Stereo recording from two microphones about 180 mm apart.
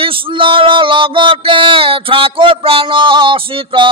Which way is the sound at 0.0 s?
30° right (ahead or behind).